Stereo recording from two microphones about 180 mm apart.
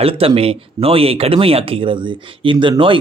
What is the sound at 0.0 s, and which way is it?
Speech, 30° right (ahead or behind).